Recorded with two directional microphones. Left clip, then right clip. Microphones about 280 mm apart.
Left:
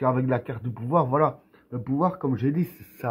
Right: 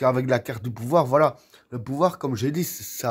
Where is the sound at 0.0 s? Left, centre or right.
Right.